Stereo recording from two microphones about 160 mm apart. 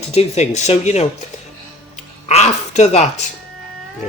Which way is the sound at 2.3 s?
45° left (ahead or behind).